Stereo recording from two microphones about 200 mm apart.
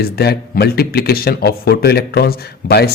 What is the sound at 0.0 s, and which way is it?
A man's voice, 50° left (ahead or behind).